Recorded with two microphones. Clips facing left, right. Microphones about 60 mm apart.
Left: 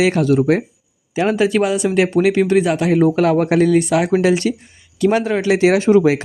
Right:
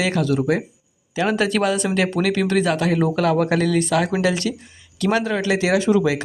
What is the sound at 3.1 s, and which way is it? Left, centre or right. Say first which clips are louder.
Speech: left 4 dB; left.